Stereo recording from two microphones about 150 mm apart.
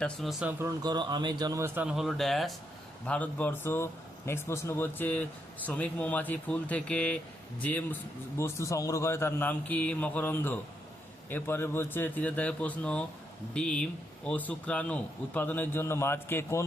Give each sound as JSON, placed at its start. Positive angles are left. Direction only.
{"t": 0.0, "sound": "speech", "side_deg": 0}
{"t": 0.6, "sound": "a man's voice", "side_deg": -25}